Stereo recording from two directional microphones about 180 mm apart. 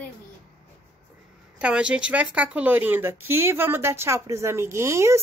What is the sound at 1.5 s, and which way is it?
Speech, 5° right (ahead or behind).